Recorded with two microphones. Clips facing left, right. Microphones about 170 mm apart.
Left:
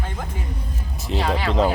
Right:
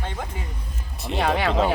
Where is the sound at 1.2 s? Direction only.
60° right (ahead or behind).